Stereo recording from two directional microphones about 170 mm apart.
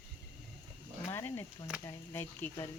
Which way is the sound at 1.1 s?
15° left (ahead or behind).